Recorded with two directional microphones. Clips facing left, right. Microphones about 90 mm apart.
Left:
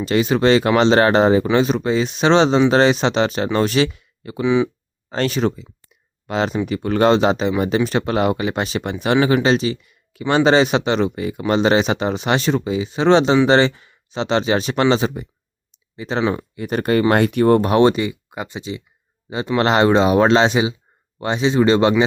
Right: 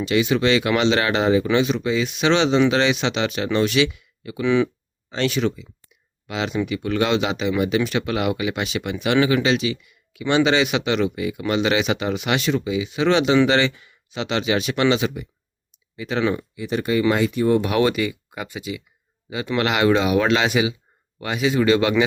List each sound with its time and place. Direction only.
0.0 s speech: 40° left (ahead or behind)
4.4 s speech: 15° left (ahead or behind)
5.0 s speech: 40° left (ahead or behind)
16.6 s speech: 50° left (ahead or behind)
17.6 s speech: 35° left (ahead or behind)